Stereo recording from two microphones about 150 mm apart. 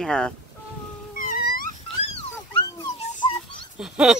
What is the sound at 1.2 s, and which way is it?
Wail, 75° left (ahead or behind).